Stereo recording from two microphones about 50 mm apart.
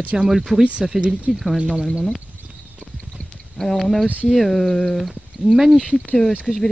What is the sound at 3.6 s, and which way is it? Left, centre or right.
Speech, centre.